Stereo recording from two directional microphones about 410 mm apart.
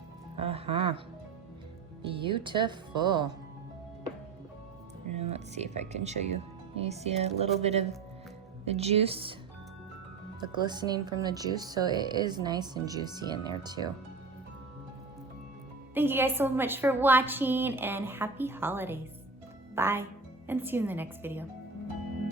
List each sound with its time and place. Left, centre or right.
0.3 s speech: centre
2.1 s speech: centre
5.1 s speech: centre
10.4 s speech: centre
16.0 s a woman's voice: centre